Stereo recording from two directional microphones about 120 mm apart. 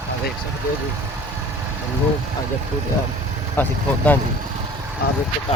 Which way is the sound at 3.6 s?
15° left (ahead or behind).